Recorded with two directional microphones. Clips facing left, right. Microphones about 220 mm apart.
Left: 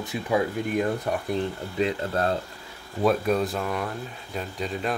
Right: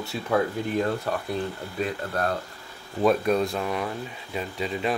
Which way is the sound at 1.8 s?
25° left (ahead or behind).